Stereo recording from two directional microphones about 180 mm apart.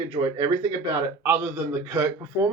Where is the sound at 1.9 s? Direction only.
15° right (ahead or behind).